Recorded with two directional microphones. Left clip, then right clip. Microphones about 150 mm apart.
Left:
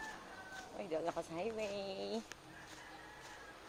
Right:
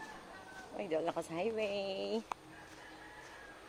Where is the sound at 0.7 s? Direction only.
55° right (ahead or behind).